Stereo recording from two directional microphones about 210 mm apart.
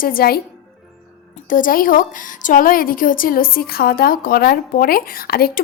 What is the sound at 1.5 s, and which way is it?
A woman's voice, 40° left (ahead or behind).